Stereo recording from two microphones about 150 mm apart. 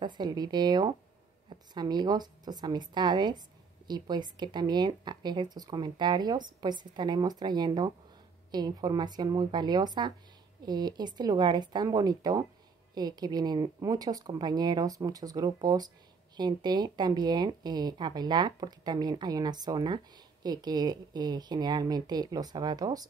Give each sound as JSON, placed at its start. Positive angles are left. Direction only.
{"t": 0.0, "sound": "a woman's voice", "side_deg": -30}